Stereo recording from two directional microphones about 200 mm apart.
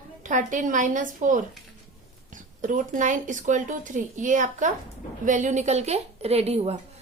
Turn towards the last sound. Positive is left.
turn(degrees=-30)  # may be behind; listen again after turning